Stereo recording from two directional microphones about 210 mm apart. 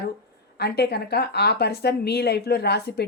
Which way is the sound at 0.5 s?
50° left (ahead or behind).